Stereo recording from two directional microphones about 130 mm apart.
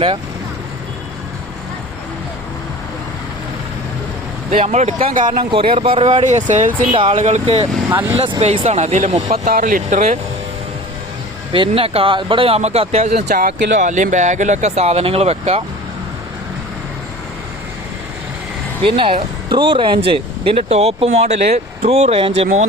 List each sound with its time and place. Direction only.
4.6 s speech: 60° right (ahead or behind); by 5.4 s 90° right
5.4 s speech: 40° right (ahead or behind)
6.2 s speech: 70° right (ahead or behind)
6.9 s speech: 45° right (ahead or behind)
7.2 s speech: 65° right (ahead or behind)
7.4 s speech: 50° right (ahead or behind)
9.4 s speech: 90° right; by 10.2 s 70° right (ahead or behind)
11.5 s speech: 45° right (ahead or behind)
18.8 s speech: 40° right (ahead or behind)